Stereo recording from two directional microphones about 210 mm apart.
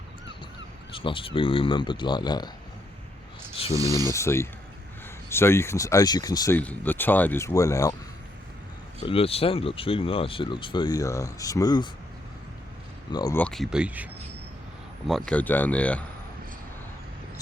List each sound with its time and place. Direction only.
0.9 s speech: 25° left (ahead or behind)
4.1 s speech: 15° left (ahead or behind)
9.0 s speech: 25° left (ahead or behind)
13.1 s speech: 20° left (ahead or behind)
13.4 s speech: centre (ahead or behind)
15.3 s speech: 5° left (ahead or behind)